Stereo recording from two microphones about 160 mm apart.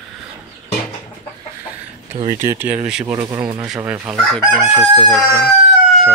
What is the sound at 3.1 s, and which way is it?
Speech, 20° right (ahead or behind).